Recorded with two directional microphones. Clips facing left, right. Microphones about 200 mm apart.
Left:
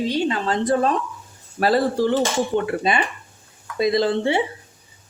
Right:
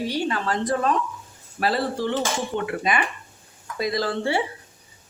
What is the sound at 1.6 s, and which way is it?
Speech, 40° left (ahead or behind).